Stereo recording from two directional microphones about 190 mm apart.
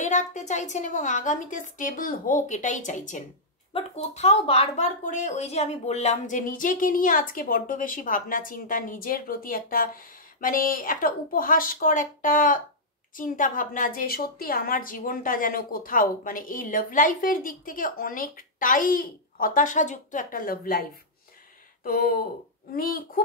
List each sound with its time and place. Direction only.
0.0 s a woman's voice: 40° left (ahead or behind)
21.8 s a woman's voice: 50° left (ahead or behind)